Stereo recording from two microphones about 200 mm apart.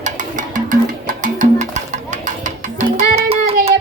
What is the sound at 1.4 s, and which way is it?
Music, 35° right (ahead or behind).